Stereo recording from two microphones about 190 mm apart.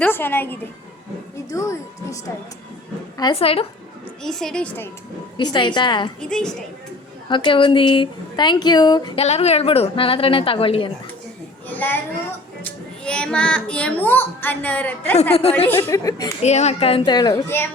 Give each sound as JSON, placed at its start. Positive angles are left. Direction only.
{"t": 0.0, "sound": "a child's voice", "side_deg": 10}
{"t": 3.2, "sound": "speech", "side_deg": 25}
{"t": 4.2, "sound": "a woman's voice", "side_deg": 0}
{"t": 5.4, "sound": "speech", "side_deg": 25}
{"t": 6.1, "sound": "a woman's voice", "side_deg": 5}
{"t": 7.3, "sound": "speech", "side_deg": 25}
{"t": 9.2, "sound": "speech", "side_deg": 35}
{"t": 11.7, "sound": "a woman's voice", "side_deg": 10}
{"t": 15.1, "sound": "speech", "side_deg": 35}
{"t": 15.5, "sound": "a child's voice", "side_deg": 10}
{"t": 16.4, "sound": "speech", "side_deg": 35}